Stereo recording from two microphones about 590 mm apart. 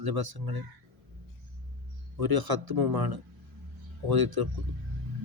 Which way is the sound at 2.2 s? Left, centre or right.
Right.